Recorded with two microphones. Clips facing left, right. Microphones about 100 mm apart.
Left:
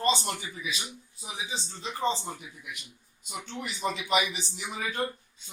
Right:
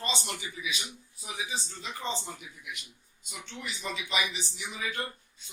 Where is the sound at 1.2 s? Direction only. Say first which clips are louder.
Even; 25° left (ahead or behind).